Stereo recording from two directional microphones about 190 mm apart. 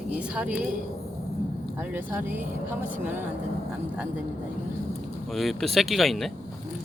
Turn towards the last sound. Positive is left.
turn(degrees=0)  # may be behind; listen again after turning